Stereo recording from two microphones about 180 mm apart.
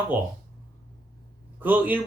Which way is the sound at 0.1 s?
10° right (ahead or behind).